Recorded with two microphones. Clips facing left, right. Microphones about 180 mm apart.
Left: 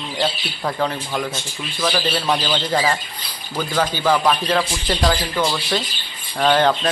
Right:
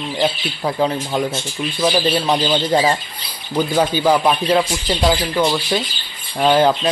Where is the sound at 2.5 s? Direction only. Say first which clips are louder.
Right 4 dB; 20° right (ahead or behind).